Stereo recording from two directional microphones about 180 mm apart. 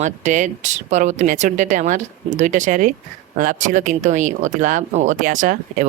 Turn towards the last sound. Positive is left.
turn(degrees=-50)  # may be behind; listen again after turning